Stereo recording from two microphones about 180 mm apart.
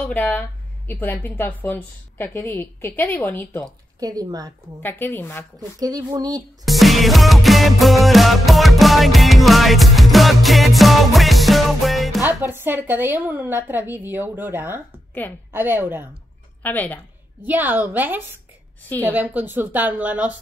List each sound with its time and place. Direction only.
0.0 s speech: 10° left (ahead or behind)
4.0 s speech: 20° right (ahead or behind)
4.8 s speech: 10° left (ahead or behind)
5.6 s speech: 20° right (ahead or behind)
6.6 s music: centre (ahead or behind)
12.3 s a woman's voice: 10° right (ahead or behind)
16.6 s speech: 10° left (ahead or behind)
17.5 s a woman's voice: 10° right (ahead or behind)